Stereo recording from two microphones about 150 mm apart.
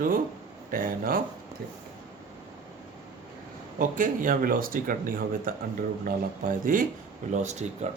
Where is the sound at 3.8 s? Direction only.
65° right (ahead or behind).